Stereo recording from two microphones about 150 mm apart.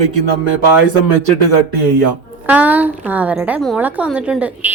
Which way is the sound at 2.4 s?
10° right (ahead or behind).